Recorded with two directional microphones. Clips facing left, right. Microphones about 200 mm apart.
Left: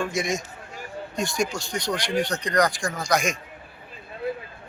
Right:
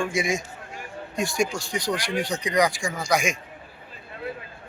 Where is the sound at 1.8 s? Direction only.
30° right (ahead or behind).